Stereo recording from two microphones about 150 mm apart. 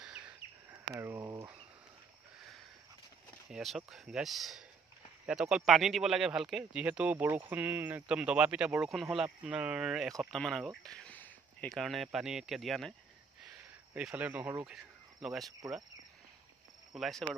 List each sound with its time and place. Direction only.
0.0 s a sound: 5° right (ahead or behind)
0.9 s speech: 20° right (ahead or behind)
1.3 s insect: 25° right (ahead or behind)
3.4 s speech: 5° right (ahead or behind)
13.9 s speech: 10° right (ahead or behind)
16.9 s speech: centre (ahead or behind)